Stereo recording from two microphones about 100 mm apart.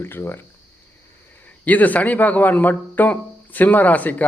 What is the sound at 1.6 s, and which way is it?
Speech, 15° left (ahead or behind).